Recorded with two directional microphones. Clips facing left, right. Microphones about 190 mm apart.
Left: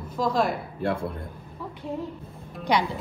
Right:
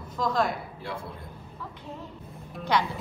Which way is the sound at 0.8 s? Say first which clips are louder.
Left 10 dB; 60° left (ahead or behind).